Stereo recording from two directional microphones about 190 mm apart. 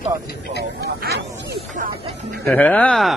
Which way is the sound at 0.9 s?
60° right (ahead or behind).